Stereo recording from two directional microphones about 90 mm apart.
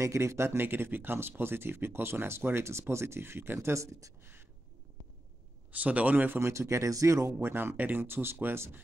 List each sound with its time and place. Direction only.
0.0 s speech: 35° right (ahead or behind)
5.7 s speech: 15° right (ahead or behind); by 7.3 s 35° right (ahead or behind)
7.3 s speech: 25° right (ahead or behind)